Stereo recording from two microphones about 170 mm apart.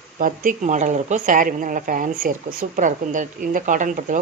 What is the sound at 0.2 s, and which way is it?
A woman's voice, 55° right (ahead or behind).